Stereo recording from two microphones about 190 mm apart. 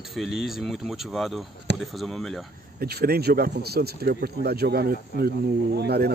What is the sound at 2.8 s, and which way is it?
Speech, 55° right (ahead or behind).